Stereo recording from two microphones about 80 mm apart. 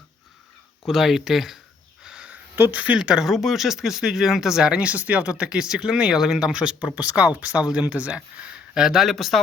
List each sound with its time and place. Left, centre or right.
0.9 s speech: centre
2.0 s a sound: centre
2.6 s speech: right; by 9.4 s centre